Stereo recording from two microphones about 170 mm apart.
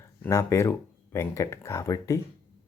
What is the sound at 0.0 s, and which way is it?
Speech, 20° left (ahead or behind).